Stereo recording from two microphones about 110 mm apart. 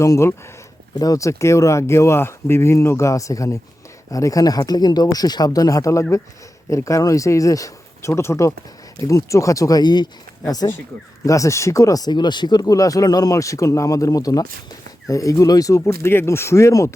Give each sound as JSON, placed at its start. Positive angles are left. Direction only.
{"t": 0.0, "sound": "speech", "side_deg": 25}